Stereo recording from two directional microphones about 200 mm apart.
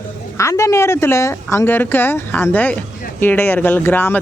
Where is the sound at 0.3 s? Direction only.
15° left (ahead or behind).